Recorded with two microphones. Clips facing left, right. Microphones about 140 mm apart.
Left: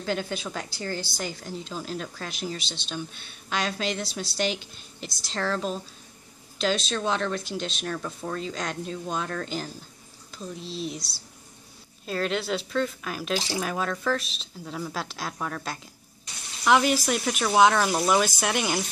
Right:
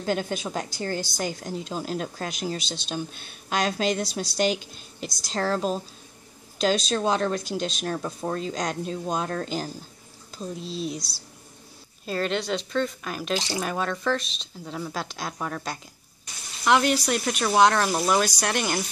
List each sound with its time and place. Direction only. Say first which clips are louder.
0.0 s a woman's voice: right 3 dB; 45° right (ahead or behind)
12.1 s speech: right 1 dB; centre (ahead or behind)